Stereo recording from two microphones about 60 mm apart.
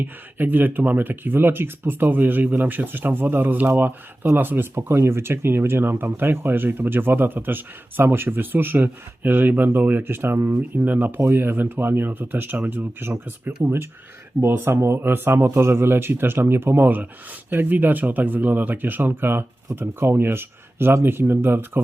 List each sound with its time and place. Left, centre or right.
0.0 s speech: right
10.8 s speech: right
13.0 s speech: right